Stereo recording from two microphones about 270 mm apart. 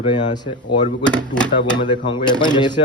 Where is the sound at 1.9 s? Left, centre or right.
Centre.